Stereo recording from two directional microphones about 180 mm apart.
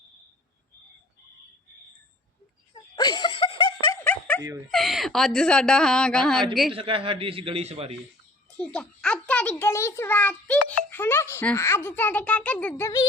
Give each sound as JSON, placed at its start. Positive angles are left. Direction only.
{"t": 2.7, "sound": "a sound", "side_deg": 25}
{"t": 4.0, "sound": "music", "side_deg": 10}
{"t": 4.7, "sound": "speech", "side_deg": 0}
{"t": 6.7, "sound": "a man's voice", "side_deg": -30}
{"t": 8.5, "sound": "a child's voice", "side_deg": 5}